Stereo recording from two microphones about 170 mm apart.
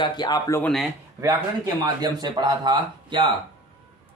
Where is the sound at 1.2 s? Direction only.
20° right (ahead or behind).